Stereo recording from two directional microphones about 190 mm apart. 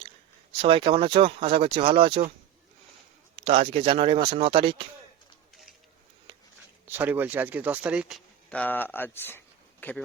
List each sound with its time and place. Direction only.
0.6 s speech: 25° right (ahead or behind)
3.3 s speech: 30° right (ahead or behind)
6.8 s speech: 10° right (ahead or behind); by 10.0 s 10° left (ahead or behind)